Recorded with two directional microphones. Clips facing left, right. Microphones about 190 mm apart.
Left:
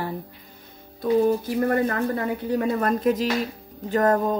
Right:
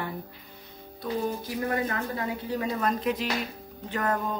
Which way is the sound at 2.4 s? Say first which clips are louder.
Left 6 dB; 55° left (ahead or behind).